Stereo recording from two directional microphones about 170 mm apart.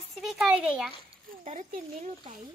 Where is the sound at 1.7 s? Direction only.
45° right (ahead or behind).